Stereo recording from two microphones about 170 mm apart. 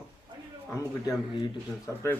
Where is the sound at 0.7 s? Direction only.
20° left (ahead or behind).